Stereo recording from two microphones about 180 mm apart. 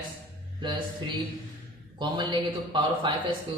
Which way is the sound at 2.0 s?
25° right (ahead or behind).